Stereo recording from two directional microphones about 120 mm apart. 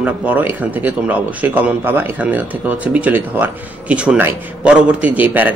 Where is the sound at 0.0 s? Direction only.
15° right (ahead or behind).